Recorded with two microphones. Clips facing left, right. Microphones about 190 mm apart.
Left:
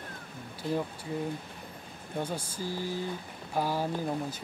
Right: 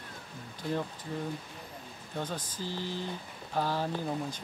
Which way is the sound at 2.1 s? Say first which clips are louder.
Left 3 dB; 10° left (ahead or behind).